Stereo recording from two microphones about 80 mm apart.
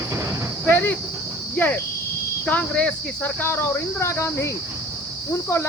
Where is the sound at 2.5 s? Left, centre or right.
Centre.